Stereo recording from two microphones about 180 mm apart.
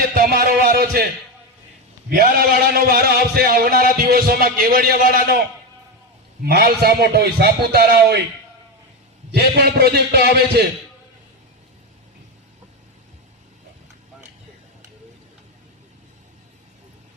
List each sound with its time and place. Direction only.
0.1 s music: 55° right (ahead or behind)
2.0 s a man's voice: 55° right (ahead or behind)
6.4 s a man's voice: 60° right (ahead or behind)
9.3 s a man's voice: 65° right (ahead or behind)